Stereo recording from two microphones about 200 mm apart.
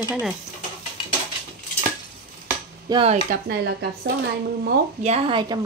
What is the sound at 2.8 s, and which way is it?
Speech, 25° right (ahead or behind).